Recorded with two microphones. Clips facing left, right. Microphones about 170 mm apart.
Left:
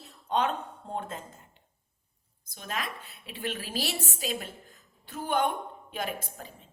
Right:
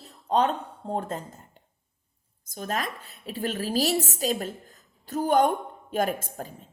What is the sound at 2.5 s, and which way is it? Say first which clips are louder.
A woman's voice: right 6 dB; 40° right (ahead or behind).